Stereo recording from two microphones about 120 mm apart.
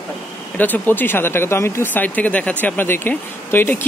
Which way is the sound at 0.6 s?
15° left (ahead or behind).